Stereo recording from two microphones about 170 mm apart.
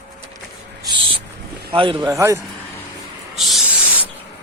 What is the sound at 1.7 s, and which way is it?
Speech, 30° right (ahead or behind).